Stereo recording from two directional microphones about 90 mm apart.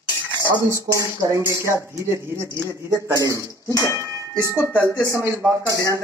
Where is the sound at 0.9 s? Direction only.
35° right (ahead or behind).